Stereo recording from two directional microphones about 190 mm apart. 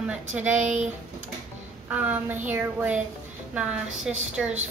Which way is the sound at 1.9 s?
10° right (ahead or behind).